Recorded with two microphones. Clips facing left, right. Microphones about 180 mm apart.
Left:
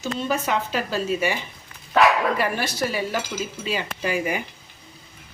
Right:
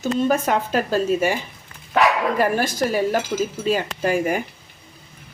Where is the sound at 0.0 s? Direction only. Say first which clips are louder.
Right 6 dB; 50° right (ahead or behind).